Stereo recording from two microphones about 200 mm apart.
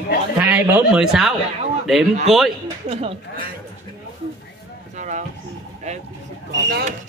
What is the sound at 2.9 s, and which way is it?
Speech, 30° right (ahead or behind).